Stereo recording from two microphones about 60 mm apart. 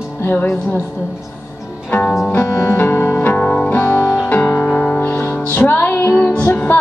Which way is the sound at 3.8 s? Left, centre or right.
Left.